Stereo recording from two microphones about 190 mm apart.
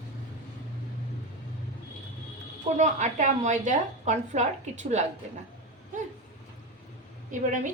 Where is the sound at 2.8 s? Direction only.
40° right (ahead or behind).